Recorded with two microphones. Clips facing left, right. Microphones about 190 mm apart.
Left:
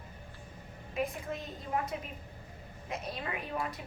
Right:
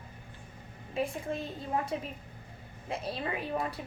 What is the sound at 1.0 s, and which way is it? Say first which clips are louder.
A woman's voice: right 2 dB; 30° right (ahead or behind).